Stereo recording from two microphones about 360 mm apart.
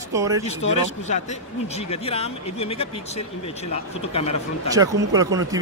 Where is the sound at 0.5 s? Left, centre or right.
Centre.